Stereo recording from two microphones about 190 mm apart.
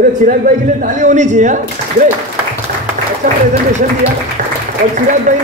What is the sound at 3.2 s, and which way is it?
Speech, 45° right (ahead or behind).